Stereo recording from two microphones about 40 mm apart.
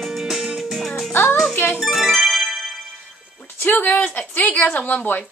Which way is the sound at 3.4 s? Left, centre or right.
Left.